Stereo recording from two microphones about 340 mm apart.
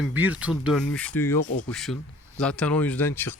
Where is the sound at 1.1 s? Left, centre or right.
Left.